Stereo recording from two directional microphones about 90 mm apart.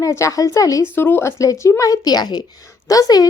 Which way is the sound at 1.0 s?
25° left (ahead or behind).